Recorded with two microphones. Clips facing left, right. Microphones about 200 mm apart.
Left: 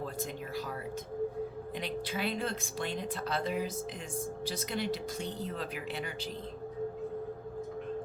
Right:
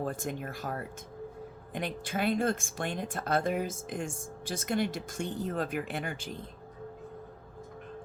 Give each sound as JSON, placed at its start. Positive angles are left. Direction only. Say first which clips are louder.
{"t": 0.0, "sound": "speech", "louder": "right 3 dB", "side_deg": -50}